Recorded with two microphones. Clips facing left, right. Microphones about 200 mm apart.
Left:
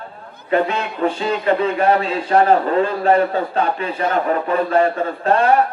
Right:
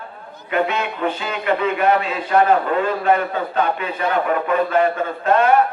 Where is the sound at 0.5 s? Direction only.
30° left (ahead or behind).